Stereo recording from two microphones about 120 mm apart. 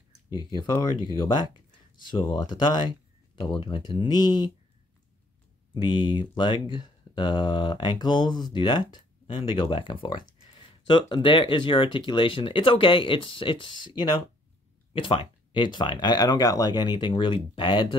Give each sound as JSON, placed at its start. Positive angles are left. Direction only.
{"t": 1.3, "sound": "speech", "side_deg": 40}
{"t": 5.8, "sound": "speech", "side_deg": 40}